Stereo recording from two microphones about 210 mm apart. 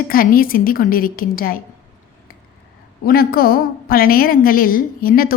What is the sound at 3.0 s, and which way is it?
A woman's voice, 45° left (ahead or behind).